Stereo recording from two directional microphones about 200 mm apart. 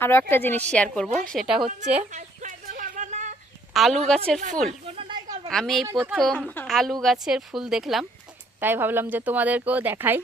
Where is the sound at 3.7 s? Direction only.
Centre (ahead or behind).